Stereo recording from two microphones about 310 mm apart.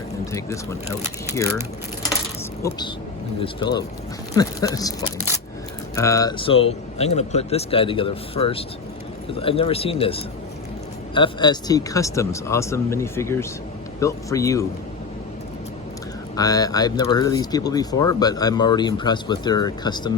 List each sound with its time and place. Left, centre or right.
0.3 s speech: centre
2.6 s speech: centre
16.3 s speech: centre